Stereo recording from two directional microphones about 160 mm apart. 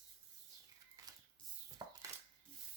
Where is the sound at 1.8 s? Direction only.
30° right (ahead or behind).